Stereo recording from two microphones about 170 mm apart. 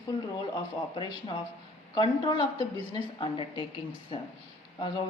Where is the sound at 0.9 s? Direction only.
25° left (ahead or behind).